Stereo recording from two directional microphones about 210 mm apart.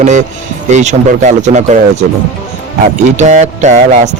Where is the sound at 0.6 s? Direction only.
35° right (ahead or behind).